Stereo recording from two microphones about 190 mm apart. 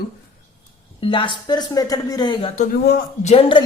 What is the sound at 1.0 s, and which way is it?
Speech, 25° left (ahead or behind).